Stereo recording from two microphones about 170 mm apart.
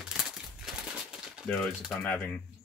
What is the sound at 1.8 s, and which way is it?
Speech, 5° left (ahead or behind).